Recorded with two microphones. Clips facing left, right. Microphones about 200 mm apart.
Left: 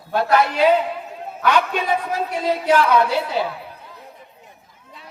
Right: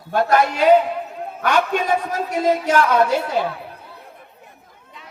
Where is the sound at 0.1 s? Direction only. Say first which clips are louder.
Right 1 dB; 45° right (ahead or behind).